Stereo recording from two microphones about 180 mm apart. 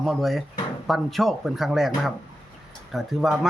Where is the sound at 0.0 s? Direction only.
Centre (ahead or behind).